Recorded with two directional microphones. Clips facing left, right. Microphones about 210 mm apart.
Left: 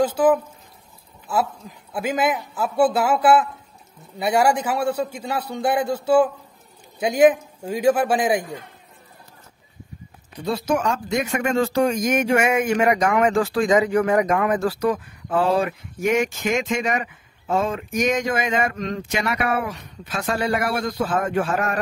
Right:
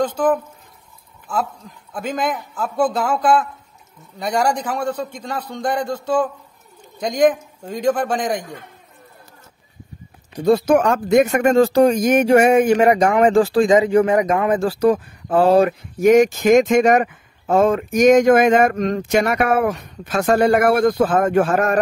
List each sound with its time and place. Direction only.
0.0 s a man's voice: 10° left (ahead or behind)
10.3 s speech: 50° right (ahead or behind)